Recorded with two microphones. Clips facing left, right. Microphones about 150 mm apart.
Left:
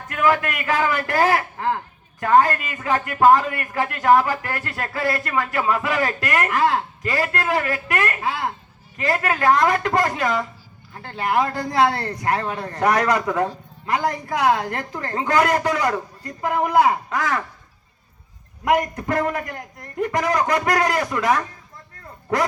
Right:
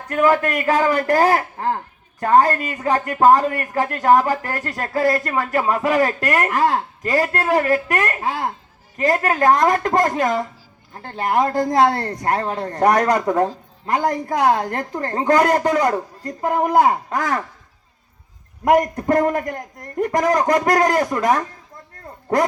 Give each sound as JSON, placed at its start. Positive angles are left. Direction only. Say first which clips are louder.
{"t": 0.1, "sound": "a man's voice", "louder": "right 4 dB", "side_deg": -40}
{"t": 18.6, "sound": "a man's voice", "louder": "right 4 dB", "side_deg": -40}